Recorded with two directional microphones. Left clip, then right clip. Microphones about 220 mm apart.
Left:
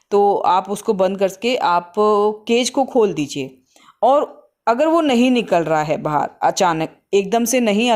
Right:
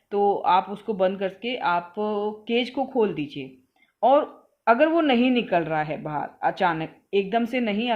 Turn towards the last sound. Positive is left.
turn(degrees=45)  # may be behind; listen again after turning